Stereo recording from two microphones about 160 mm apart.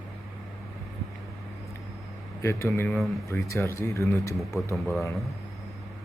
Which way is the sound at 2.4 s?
15° left (ahead or behind).